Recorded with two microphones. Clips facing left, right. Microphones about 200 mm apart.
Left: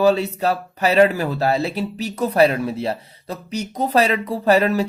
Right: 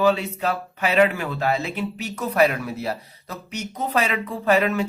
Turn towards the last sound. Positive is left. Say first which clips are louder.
# left 3 dB
turn(degrees=35)  # may be behind; listen again after turning